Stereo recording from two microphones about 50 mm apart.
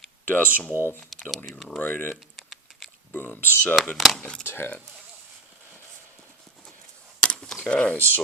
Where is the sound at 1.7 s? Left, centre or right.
Left.